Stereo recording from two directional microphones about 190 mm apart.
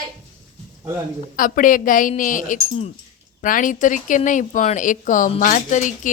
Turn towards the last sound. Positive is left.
turn(degrees=40)  # may be behind; listen again after turning